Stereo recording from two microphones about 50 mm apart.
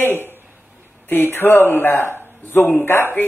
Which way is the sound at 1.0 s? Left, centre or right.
Left.